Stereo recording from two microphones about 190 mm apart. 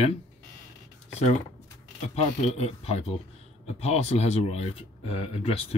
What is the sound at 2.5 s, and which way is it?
Speech, 35° left (ahead or behind).